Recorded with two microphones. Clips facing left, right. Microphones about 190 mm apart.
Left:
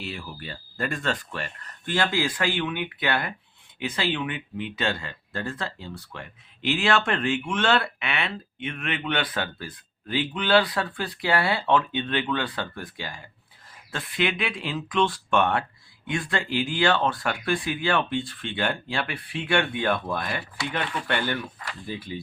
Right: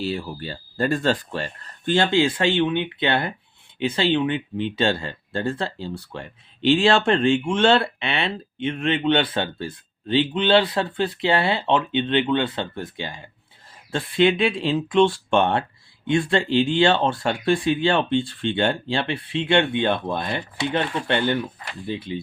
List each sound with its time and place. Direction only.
0.0 s speech: 35° right (ahead or behind)